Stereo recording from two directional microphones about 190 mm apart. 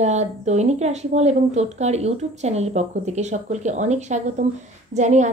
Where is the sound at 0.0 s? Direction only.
35° right (ahead or behind).